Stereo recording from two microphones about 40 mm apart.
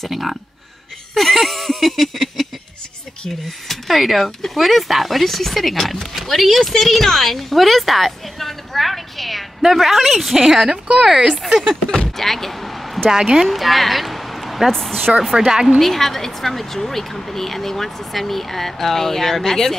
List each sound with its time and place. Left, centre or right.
0.0 s speech: centre
1.1 s a sound: centre
3.6 s a woman's voice: centre
12.2 s a sound: centre
13.1 s speech: centre
13.5 s speech: centre
14.7 s speech: centre
15.3 s speech: centre
15.8 s speech: centre